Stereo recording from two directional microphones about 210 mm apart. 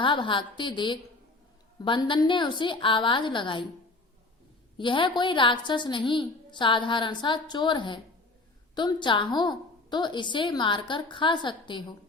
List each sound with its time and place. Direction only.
0.0 s a woman's voice: 25° left (ahead or behind)
4.8 s a woman's voice: 25° left (ahead or behind)